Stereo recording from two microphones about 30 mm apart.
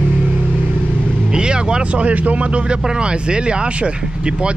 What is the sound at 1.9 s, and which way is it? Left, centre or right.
Speech, right.